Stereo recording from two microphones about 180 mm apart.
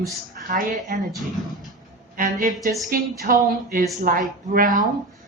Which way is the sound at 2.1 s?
50° right (ahead or behind).